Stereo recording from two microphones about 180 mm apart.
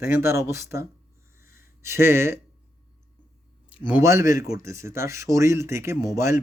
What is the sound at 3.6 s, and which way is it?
Speech, 10° right (ahead or behind).